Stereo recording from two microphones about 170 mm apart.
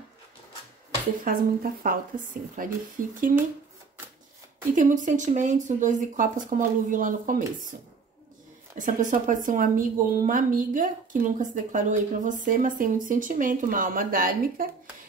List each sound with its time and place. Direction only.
1.2 s speech: 55° right (ahead or behind)
4.7 s speech: 50° right (ahead or behind)
8.7 s speech: 50° right (ahead or behind)